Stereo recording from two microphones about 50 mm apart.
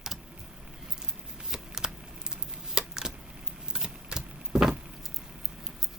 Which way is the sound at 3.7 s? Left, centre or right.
Centre.